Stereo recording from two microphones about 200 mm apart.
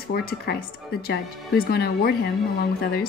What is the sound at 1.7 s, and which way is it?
Speech, 50° left (ahead or behind).